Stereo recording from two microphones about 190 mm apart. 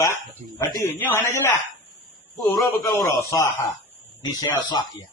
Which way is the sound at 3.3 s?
15° left (ahead or behind).